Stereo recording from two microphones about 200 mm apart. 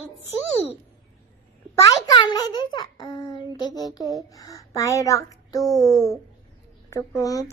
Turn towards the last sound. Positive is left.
turn(degrees=15)  # may be behind; listen again after turning